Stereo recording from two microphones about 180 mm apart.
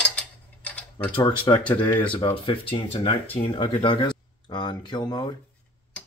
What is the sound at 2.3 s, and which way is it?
Speech, 30° left (ahead or behind).